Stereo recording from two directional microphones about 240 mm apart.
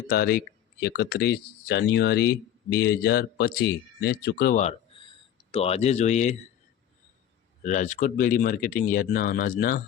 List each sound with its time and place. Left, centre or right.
0.1 s speech: left
7.6 s speech: left